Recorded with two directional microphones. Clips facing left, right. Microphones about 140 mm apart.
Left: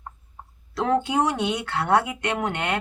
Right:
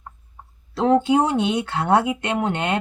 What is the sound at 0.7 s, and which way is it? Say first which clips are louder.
Speech: right 6 dB; 25° right (ahead or behind).